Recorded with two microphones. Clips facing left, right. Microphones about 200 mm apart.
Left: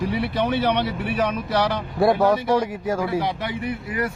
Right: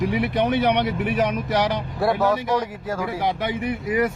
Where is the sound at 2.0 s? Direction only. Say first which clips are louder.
Left 3 dB; 15° left (ahead or behind).